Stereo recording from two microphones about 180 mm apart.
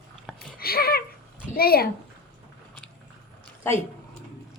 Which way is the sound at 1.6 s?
55° left (ahead or behind).